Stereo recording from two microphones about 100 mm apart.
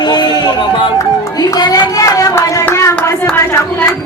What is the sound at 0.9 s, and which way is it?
Speech, 35° left (ahead or behind).